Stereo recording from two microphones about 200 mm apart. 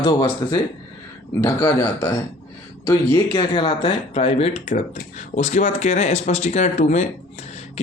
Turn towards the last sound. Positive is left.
turn(degrees=35)  # may be behind; listen again after turning